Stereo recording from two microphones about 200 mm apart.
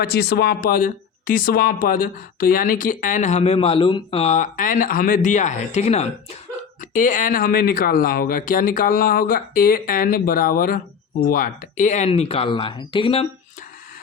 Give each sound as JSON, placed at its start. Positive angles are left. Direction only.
{"t": 0.0, "sound": "speech", "side_deg": 50}